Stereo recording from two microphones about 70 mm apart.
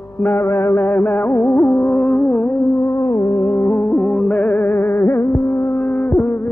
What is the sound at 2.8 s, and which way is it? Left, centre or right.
Music, left.